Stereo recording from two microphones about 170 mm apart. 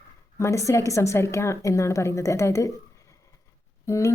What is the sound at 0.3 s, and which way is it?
Speech, 20° left (ahead or behind).